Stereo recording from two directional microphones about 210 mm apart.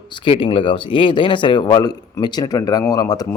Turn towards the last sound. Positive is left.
turn(degrees=15)  # may be behind; listen again after turning